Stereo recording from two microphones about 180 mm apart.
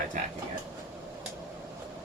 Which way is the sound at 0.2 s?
45° right (ahead or behind).